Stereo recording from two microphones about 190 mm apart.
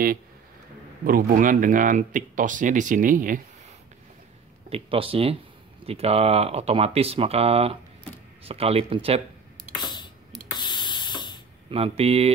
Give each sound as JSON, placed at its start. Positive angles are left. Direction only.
{"t": 1.0, "sound": "speech", "side_deg": -45}
{"t": 4.6, "sound": "speech", "side_deg": -30}
{"t": 9.8, "sound": "a sound", "side_deg": 20}
{"t": 10.5, "sound": "spray", "side_deg": 25}
{"t": 11.7, "sound": "speech", "side_deg": -30}